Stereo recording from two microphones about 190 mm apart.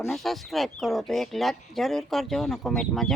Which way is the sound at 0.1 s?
Centre (ahead or behind).